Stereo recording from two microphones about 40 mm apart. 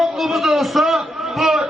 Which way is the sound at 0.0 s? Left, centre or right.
Centre.